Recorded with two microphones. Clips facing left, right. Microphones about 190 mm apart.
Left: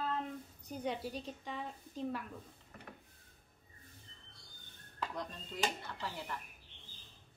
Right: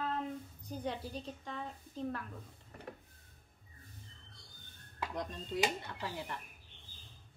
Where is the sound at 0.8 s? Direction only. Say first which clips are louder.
Left 1 dB; 5° left (ahead or behind).